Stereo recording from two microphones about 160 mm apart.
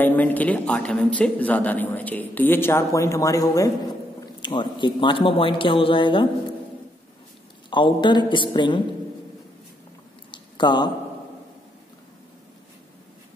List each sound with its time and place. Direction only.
0.0 s speech: 10° left (ahead or behind); by 6.2 s 30° left (ahead or behind)
7.7 s a woman's voice: 30° left (ahead or behind)
10.3 s a sound: 30° left (ahead or behind)